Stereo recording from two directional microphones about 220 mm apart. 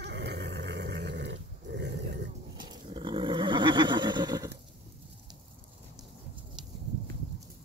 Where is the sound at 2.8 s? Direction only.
25° right (ahead or behind).